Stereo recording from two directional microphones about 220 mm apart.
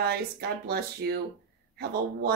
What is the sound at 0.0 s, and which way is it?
Speech, 45° right (ahead or behind).